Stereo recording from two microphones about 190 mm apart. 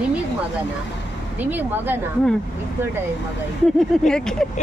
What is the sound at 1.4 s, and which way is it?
Speech, 10° right (ahead or behind).